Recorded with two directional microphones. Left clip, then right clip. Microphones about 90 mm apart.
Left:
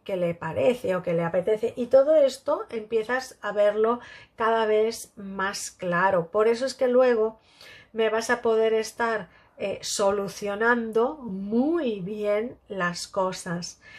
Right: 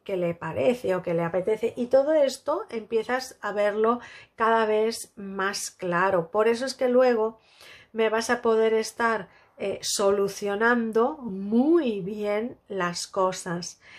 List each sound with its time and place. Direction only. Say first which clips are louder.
0.0 s a woman's voice: left 1 dB; 10° right (ahead or behind)
1.5 s speech: left 2 dB; 35° right (ahead or behind)
12.1 s speech: left 2 dB; 25° right (ahead or behind)